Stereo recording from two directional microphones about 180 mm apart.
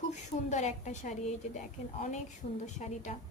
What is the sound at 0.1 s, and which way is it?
A woman's voice, 40° left (ahead or behind).